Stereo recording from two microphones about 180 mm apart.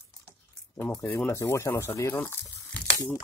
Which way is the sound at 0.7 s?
10° left (ahead or behind).